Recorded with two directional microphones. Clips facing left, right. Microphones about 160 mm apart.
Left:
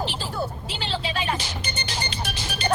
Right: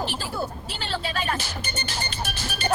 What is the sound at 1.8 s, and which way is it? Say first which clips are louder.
Music: left 1 dB; 10° left (ahead or behind).